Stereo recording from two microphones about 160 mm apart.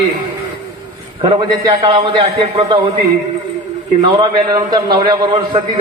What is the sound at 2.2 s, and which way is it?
Speech, 40° right (ahead or behind).